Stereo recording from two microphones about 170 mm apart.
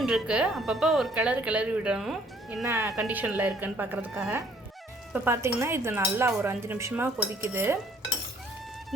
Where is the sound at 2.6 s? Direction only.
15° right (ahead or behind).